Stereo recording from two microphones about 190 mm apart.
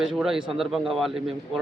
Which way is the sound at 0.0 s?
Centre (ahead or behind).